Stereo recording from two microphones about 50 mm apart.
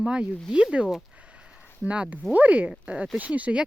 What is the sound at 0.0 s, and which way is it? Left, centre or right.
Speech, right.